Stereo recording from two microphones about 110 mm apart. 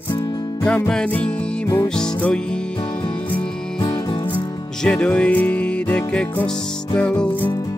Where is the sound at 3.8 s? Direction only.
45° left (ahead or behind).